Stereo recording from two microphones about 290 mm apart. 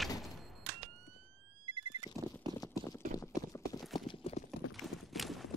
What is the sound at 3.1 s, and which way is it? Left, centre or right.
Clip-clop, centre.